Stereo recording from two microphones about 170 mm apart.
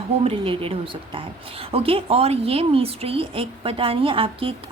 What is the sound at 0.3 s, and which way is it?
Speech, 35° right (ahead or behind).